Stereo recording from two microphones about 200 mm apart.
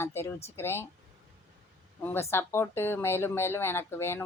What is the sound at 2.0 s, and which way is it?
Speech, 10° left (ahead or behind).